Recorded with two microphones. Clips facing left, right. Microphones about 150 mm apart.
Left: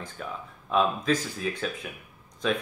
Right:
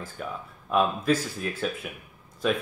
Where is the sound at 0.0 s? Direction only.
5° right (ahead or behind).